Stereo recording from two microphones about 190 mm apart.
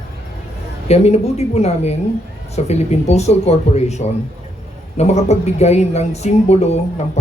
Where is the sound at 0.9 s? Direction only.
35° left (ahead or behind).